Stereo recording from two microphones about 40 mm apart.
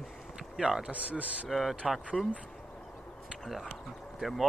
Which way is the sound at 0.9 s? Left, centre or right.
Right.